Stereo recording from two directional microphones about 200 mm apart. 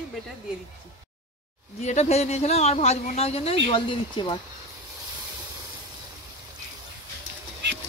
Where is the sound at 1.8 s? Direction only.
35° left (ahead or behind).